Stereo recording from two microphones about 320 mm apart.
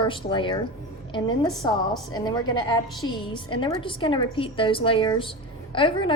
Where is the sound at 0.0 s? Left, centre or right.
Centre.